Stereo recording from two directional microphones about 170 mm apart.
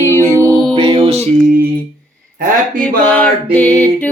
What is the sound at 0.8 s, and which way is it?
Music, 35° right (ahead or behind).